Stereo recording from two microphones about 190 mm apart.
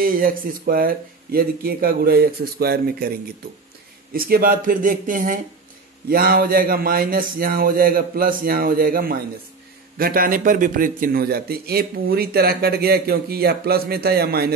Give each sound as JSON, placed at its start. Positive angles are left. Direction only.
{"t": 0.0, "sound": "a man's voice", "side_deg": -50}
{"t": 4.1, "sound": "a man's voice", "side_deg": -50}